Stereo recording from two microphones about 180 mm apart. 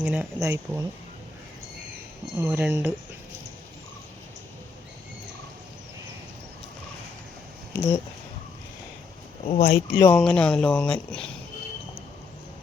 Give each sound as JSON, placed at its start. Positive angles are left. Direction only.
{"t": 0.0, "sound": "speech", "side_deg": -5}
{"t": 2.4, "sound": "speech", "side_deg": -15}
{"t": 7.8, "sound": "speech", "side_deg": 15}
{"t": 9.6, "sound": "speech", "side_deg": 55}
{"t": 10.2, "sound": "speech", "side_deg": 5}